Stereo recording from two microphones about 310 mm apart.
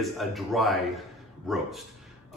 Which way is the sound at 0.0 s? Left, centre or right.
Centre.